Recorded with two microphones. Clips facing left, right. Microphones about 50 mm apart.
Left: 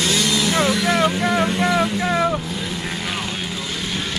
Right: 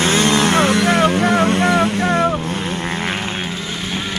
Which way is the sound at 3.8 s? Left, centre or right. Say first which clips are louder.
Right 2 dB; centre.